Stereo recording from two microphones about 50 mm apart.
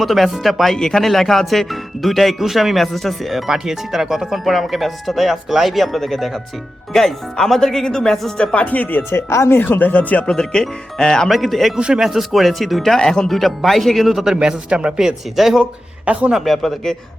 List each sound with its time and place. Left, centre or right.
0.0 s speech: centre
8.4 s speech: left
9.0 s speech: left
9.6 s speech: left
10.2 s speech: centre
11.3 s speech: centre
13.0 s speech: centre
14.4 s speech: right
15.4 s speech: centre